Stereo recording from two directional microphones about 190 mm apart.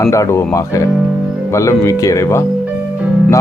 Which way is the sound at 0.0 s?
15° left (ahead or behind).